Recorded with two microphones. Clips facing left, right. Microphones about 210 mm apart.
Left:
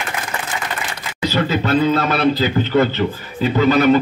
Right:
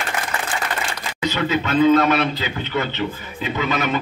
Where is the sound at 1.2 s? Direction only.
35° left (ahead or behind).